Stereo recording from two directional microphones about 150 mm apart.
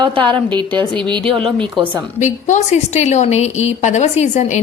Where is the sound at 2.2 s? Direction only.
50° left (ahead or behind).